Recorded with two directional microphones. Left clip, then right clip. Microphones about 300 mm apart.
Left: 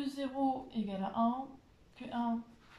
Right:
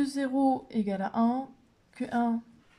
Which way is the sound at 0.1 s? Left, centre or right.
Right.